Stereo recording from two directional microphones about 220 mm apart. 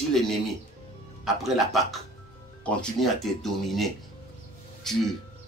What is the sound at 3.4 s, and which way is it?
Speech, centre (ahead or behind).